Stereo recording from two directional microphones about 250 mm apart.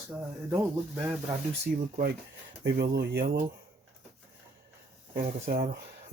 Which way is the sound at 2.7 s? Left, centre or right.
Right.